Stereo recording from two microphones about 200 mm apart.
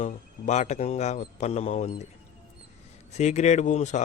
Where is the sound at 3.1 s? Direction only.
35° left (ahead or behind).